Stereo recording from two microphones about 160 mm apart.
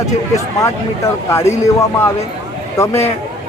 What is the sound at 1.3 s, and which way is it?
Speech, 15° left (ahead or behind).